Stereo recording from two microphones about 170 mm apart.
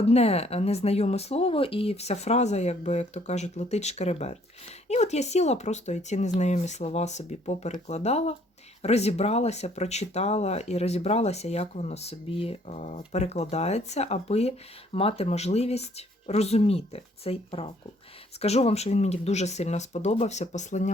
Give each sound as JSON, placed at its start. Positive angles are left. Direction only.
{"t": 0.1, "sound": "speech", "side_deg": 35}